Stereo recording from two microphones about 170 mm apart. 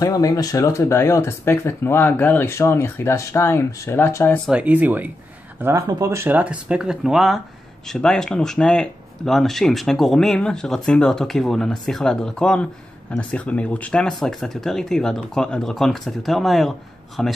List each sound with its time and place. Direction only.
0.0 s speech: 20° left (ahead or behind)
4.5 s speech: 10° right (ahead or behind)